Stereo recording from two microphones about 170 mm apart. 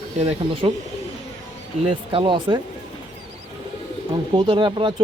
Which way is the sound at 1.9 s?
30° right (ahead or behind).